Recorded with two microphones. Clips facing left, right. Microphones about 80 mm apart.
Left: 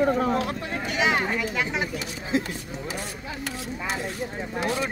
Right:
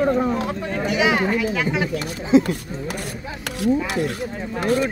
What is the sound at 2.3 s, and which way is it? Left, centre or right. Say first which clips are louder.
Speech: right 11 dB; right.